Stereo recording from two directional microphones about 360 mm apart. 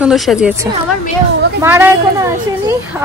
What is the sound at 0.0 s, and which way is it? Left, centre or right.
A woman's voice, centre.